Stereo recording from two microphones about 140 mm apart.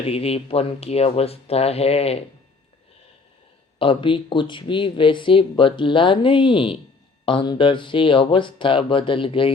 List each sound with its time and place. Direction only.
0.0 s speech: 45° left (ahead or behind)
3.8 s speech: 40° left (ahead or behind)